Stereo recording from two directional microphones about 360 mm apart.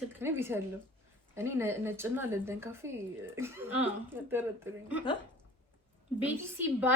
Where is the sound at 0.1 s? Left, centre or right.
Centre.